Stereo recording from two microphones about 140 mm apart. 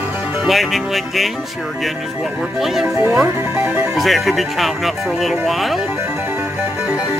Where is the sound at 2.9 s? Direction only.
20° right (ahead or behind).